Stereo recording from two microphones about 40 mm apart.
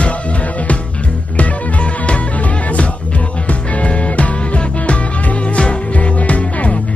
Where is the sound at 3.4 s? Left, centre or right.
Left.